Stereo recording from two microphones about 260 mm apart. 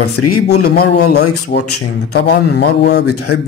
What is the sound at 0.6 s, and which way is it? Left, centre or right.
Speech, left.